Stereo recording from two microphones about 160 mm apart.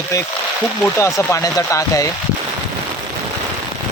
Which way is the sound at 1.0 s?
20° left (ahead or behind).